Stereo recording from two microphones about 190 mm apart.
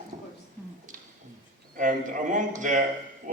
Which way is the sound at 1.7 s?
45° right (ahead or behind).